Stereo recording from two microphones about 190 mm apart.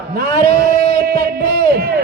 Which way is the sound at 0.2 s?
55° right (ahead or behind).